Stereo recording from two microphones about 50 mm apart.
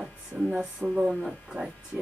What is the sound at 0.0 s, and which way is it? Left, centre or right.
Music, centre.